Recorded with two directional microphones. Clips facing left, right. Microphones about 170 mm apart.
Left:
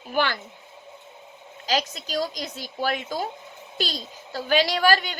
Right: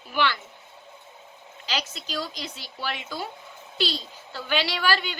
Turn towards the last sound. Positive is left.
turn(degrees=45)  # may be behind; listen again after turning